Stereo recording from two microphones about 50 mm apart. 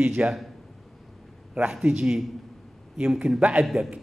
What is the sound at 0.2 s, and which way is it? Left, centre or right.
Speech, right.